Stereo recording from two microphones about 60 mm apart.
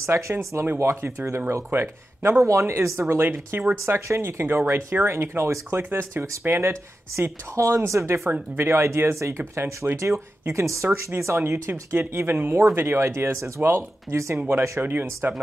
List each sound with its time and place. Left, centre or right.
0.1 s speech: right
1.7 s speech: right
2.4 s speech: right
5.8 s speech: right
14.1 s speech: right
14.5 s speech: right